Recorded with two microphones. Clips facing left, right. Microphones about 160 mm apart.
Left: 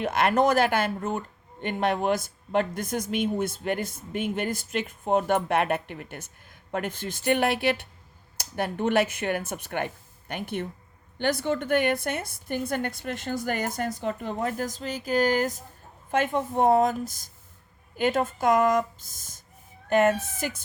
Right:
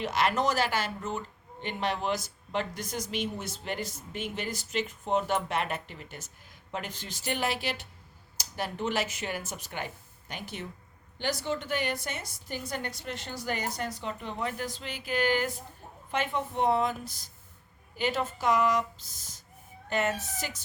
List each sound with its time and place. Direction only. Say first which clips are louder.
0.0 s speech: left 5 dB; 55° left (ahead or behind)